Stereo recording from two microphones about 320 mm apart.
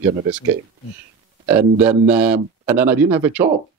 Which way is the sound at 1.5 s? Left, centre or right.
Centre.